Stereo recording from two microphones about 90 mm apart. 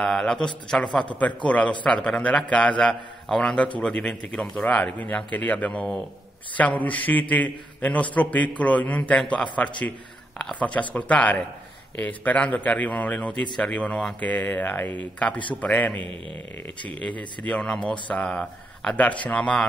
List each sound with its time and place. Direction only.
0.0 s a man's voice: 10° left (ahead or behind)